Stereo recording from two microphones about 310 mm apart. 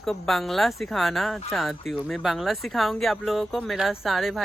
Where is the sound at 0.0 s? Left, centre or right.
Centre.